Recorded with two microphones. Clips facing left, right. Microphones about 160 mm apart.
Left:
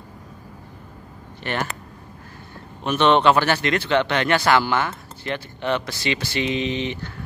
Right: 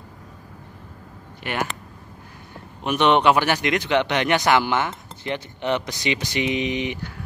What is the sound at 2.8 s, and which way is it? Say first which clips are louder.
Speech: left 1 dB; 15° right (ahead or behind).